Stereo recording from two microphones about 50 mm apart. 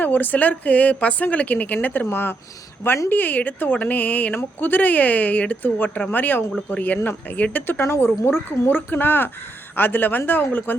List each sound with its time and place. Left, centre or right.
0.0 s a woman's voice: left
7.8 s a woman's voice: left